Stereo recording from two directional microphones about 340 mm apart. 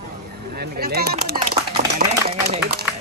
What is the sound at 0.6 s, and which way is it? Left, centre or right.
A man's voice, right.